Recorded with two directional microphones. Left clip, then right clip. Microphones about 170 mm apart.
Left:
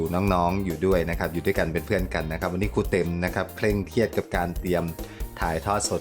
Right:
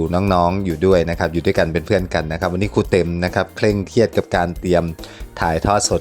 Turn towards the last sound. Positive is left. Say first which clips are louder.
# right 9 dB
turn(degrees=-35)  # may be behind; listen again after turning